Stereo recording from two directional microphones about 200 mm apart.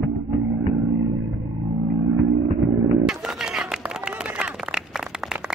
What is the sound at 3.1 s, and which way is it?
Run, 5° right (ahead or behind).